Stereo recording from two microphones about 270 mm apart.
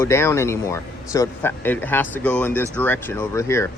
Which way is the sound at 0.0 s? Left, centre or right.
Centre.